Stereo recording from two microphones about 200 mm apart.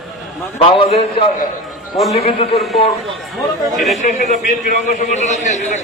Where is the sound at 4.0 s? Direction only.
35° left (ahead or behind).